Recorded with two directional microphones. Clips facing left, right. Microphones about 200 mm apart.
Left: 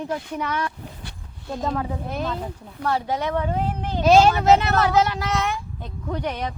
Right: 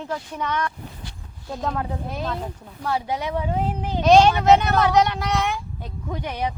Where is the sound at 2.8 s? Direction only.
10° right (ahead or behind).